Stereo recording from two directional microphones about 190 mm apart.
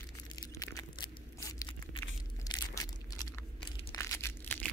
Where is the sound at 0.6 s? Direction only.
20° left (ahead or behind).